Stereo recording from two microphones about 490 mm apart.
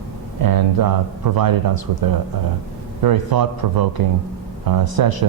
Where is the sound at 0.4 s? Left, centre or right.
Right.